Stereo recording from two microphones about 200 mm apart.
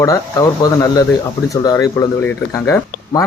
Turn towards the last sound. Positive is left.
turn(degrees=15)  # may be behind; listen again after turning